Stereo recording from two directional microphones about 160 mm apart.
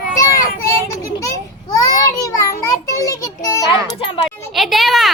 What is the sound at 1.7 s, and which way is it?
Child singing, 20° left (ahead or behind).